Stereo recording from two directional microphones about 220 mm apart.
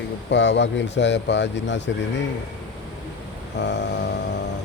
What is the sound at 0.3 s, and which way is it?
Speech, 55° left (ahead or behind).